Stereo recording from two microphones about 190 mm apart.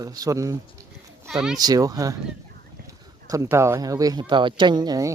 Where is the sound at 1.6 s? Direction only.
20° right (ahead or behind).